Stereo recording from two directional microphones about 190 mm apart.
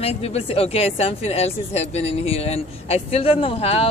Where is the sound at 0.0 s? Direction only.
35° left (ahead or behind).